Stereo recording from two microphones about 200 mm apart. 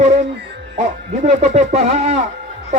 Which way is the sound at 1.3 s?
35° right (ahead or behind).